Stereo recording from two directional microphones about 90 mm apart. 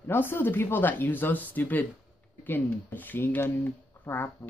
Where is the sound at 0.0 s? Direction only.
25° left (ahead or behind).